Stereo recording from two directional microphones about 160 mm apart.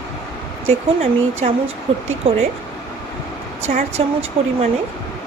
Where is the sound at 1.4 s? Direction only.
40° right (ahead or behind).